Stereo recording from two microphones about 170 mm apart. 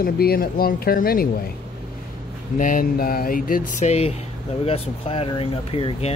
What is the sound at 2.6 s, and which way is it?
Speech, 55° left (ahead or behind).